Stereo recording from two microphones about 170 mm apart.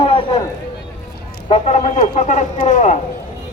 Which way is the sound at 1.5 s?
40° left (ahead or behind).